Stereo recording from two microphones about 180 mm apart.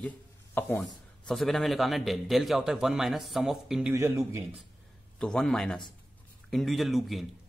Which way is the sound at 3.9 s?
15° right (ahead or behind).